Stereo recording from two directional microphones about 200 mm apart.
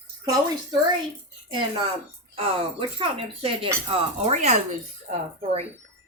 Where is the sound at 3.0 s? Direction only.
30° right (ahead or behind).